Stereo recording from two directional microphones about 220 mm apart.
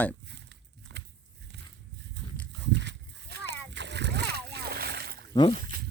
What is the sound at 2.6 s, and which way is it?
Splash, 50° right (ahead or behind).